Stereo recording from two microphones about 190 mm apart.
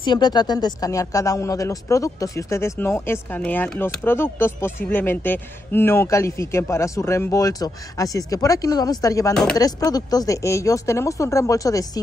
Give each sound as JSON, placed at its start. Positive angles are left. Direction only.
{"t": 0.0, "sound": "speech", "side_deg": 25}
{"t": 9.3, "sound": "chopping", "side_deg": 5}
{"t": 9.6, "sound": "speech", "side_deg": 20}